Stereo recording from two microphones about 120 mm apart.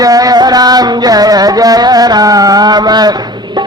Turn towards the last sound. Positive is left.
turn(degrees=-35)  # may be behind; listen again after turning